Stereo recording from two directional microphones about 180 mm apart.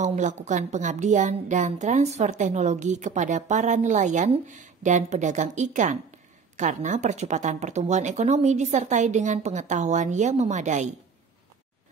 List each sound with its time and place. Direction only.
0.0 s a woman's voice: 40° right (ahead or behind)